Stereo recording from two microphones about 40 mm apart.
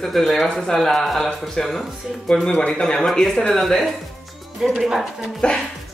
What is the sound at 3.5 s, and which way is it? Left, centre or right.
Speech, centre.